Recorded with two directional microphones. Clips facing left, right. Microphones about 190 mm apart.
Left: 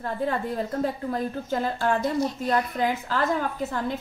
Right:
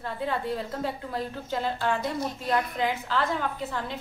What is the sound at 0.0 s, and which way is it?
A woman's voice, 45° left (ahead or behind).